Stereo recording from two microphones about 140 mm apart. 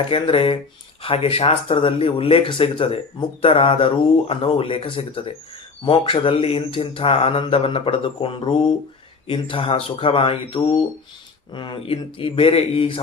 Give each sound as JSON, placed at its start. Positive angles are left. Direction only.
{"t": 0.1, "sound": "speech", "side_deg": 40}